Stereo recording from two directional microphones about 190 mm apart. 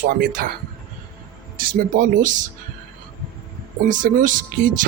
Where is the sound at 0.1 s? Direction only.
45° right (ahead or behind).